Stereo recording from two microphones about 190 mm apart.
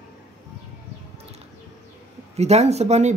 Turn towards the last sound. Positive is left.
turn(degrees=-35)  # may be behind; listen again after turning